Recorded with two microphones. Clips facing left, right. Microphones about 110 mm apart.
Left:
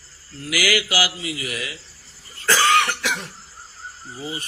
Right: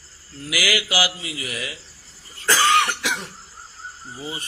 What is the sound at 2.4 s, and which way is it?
Cough, 20° right (ahead or behind).